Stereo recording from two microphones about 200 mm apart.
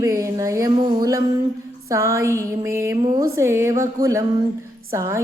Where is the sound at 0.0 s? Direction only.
15° right (ahead or behind).